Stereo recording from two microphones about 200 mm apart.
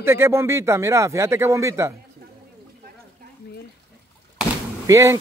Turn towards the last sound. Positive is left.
turn(degrees=-15)  # may be behind; listen again after turning